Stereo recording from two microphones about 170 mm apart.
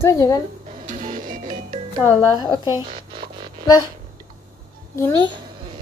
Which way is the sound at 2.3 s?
25° left (ahead or behind).